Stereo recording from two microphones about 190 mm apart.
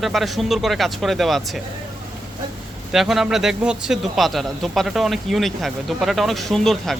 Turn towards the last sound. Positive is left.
turn(degrees=0)  # may be behind; listen again after turning